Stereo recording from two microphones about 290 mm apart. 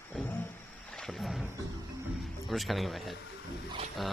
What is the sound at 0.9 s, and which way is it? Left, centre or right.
Wild animals, centre.